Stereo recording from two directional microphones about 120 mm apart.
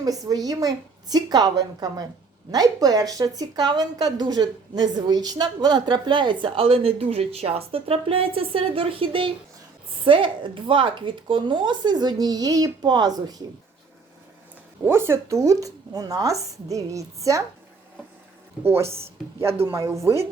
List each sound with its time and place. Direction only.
0.0 s speech: 30° right (ahead or behind)
14.8 s speech: 20° right (ahead or behind)
18.6 s speech: 20° right (ahead or behind)